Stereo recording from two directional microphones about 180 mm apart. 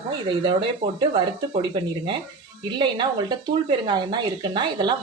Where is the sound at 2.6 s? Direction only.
25° right (ahead or behind).